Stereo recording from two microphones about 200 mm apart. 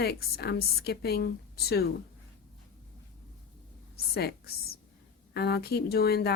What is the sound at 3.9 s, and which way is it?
A woman's voice, 50° left (ahead or behind).